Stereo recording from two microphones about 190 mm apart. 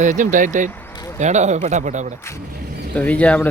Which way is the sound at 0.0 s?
40° right (ahead or behind).